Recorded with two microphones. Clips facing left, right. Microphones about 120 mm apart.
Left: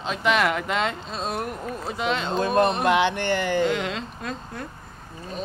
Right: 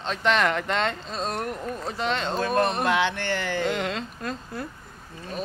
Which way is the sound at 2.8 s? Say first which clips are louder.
Left 3 dB; 15° left (ahead or behind).